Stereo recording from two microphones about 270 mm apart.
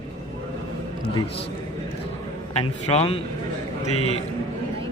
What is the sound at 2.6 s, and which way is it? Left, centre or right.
Speech, left.